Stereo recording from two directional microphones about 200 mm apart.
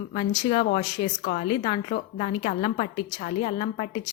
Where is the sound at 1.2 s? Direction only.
45° left (ahead or behind).